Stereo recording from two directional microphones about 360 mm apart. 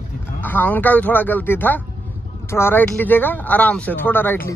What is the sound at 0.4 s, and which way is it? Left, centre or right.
Speech, centre.